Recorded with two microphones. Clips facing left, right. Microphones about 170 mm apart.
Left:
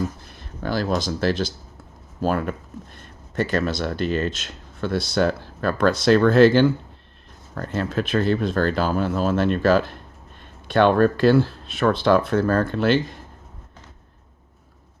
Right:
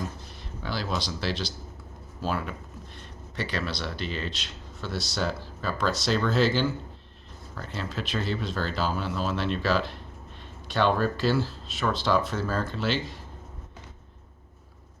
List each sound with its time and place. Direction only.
0.3 s speech: 50° left (ahead or behind)